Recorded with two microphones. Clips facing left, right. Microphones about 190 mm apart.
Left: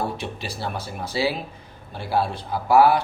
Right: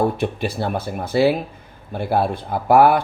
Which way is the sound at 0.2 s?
55° right (ahead or behind).